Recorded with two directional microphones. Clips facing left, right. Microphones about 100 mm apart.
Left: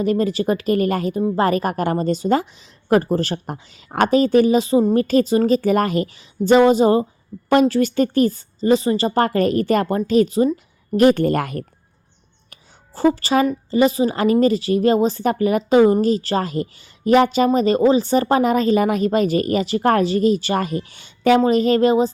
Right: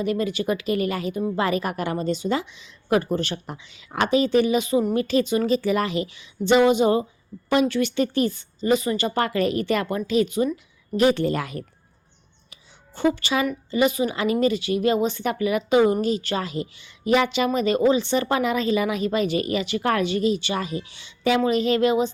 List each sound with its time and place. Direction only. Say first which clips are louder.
0.0 s a woman's voice: left 5 dB; 40° left (ahead or behind)
4.9 s a woman's voice: left 5 dB; 45° left (ahead or behind)
10.9 s speech: left 5 dB; 50° left (ahead or behind)
12.9 s a woman's voice: left 5 dB; 35° left (ahead or behind)